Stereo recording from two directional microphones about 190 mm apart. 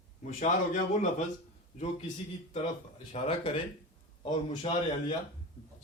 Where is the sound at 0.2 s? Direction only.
40° left (ahead or behind).